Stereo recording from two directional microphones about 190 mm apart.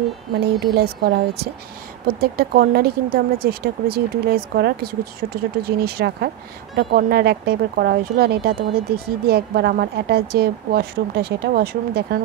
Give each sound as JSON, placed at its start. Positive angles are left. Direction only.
{"t": 0.7, "sound": "speech", "side_deg": -55}